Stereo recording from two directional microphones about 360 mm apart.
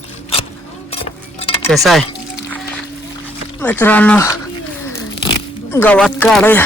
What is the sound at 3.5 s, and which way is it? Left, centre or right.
Speech, centre.